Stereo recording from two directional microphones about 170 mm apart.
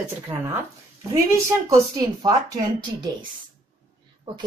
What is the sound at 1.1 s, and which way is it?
Speech, 20° right (ahead or behind).